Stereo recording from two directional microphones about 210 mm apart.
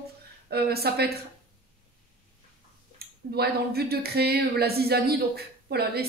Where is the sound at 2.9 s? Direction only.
50° right (ahead or behind).